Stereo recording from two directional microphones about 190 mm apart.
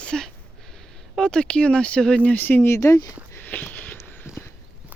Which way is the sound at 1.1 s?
5° left (ahead or behind).